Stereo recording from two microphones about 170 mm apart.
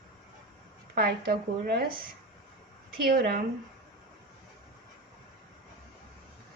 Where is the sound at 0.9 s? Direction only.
65° right (ahead or behind).